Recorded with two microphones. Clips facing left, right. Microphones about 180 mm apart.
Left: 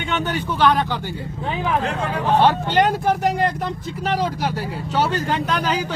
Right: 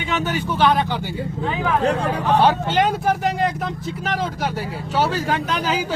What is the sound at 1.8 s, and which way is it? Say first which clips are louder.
Speech: right 4 dB; 35° right (ahead or behind).